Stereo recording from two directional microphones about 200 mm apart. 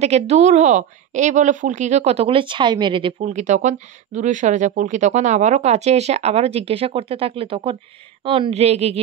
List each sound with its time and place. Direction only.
0.0 s a woman's voice: 30° right (ahead or behind)